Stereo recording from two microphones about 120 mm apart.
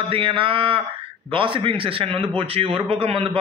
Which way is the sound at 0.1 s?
45° right (ahead or behind).